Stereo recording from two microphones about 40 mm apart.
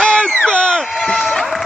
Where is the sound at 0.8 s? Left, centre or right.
Centre.